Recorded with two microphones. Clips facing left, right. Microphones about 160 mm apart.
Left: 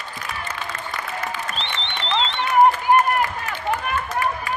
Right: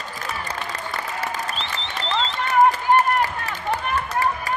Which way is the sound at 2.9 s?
35° right (ahead or behind).